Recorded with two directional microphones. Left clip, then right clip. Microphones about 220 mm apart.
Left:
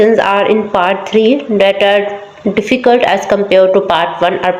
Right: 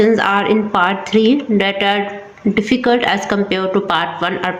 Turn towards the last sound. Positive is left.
turn(degrees=0)  # may be behind; listen again after turning